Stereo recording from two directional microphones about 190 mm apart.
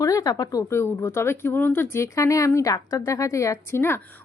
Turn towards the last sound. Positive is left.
turn(degrees=10)  # may be behind; listen again after turning